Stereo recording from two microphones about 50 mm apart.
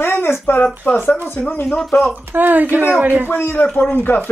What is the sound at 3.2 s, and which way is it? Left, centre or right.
Speech, left.